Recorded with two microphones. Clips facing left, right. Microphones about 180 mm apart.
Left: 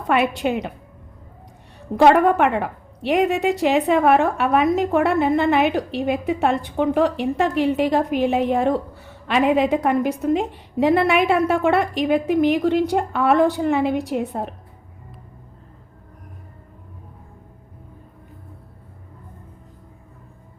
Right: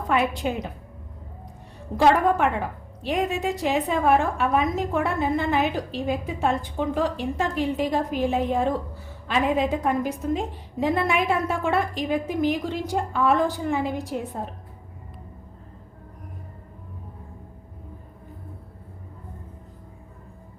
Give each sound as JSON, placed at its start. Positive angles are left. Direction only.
{"t": 0.1, "sound": "a woman's voice", "side_deg": 70}
{"t": 2.0, "sound": "a woman's voice", "side_deg": 65}